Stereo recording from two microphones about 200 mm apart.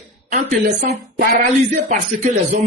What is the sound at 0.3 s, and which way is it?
Speech, 50° right (ahead or behind).